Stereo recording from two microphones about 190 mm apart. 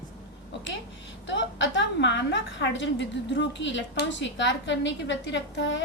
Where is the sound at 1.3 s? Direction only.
70° left (ahead or behind).